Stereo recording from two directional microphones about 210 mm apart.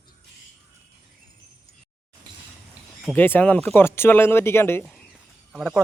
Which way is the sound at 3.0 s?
10° left (ahead or behind).